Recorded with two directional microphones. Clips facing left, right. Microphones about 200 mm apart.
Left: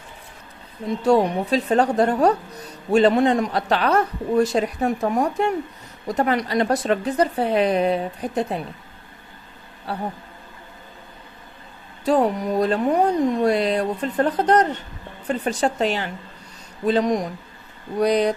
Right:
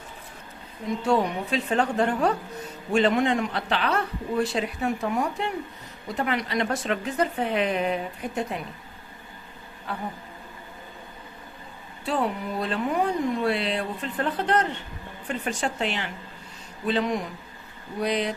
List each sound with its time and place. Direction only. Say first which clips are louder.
1.0 s speech: left 6 dB; 40° left (ahead or behind)
9.9 s speech: left 5 dB; 35° left (ahead or behind)
12.0 s speech: left 8 dB; 40° left (ahead or behind)